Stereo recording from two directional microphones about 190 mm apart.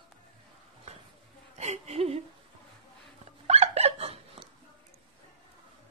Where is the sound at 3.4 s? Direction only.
35° right (ahead or behind).